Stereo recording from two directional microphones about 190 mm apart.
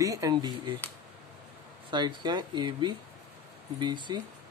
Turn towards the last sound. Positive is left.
turn(degrees=-25)  # may be behind; listen again after turning